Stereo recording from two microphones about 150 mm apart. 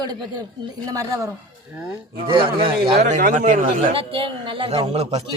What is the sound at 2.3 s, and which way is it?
Speech, 35° right (ahead or behind).